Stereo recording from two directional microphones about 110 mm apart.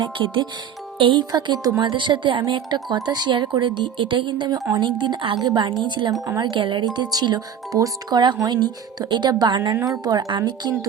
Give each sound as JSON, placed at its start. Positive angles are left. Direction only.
{"t": 0.0, "sound": "speech", "side_deg": -50}
{"t": 6.2, "sound": "speech", "side_deg": -30}
{"t": 6.5, "sound": "speech", "side_deg": -45}